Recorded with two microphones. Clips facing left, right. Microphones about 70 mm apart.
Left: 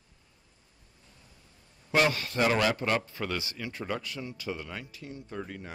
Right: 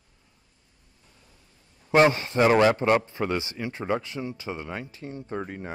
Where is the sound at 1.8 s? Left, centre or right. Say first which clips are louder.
Right 7 dB; right.